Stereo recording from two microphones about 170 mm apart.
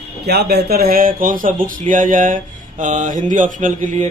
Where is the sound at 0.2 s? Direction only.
70° right (ahead or behind).